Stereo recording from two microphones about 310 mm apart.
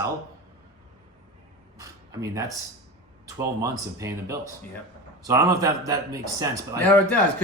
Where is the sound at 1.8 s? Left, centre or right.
Centre.